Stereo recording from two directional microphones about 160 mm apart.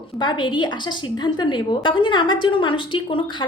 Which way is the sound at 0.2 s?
30° left (ahead or behind).